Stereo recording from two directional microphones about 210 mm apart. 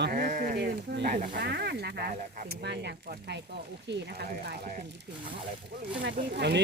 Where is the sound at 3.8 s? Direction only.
50° right (ahead or behind).